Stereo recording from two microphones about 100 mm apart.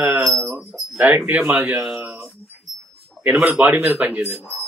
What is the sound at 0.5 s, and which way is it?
Speech, 5° right (ahead or behind).